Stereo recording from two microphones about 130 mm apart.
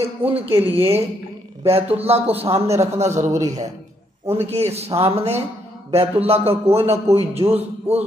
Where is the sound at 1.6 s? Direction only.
50° right (ahead or behind).